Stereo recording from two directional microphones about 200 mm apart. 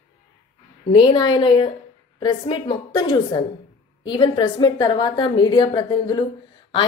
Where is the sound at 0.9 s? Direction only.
25° left (ahead or behind).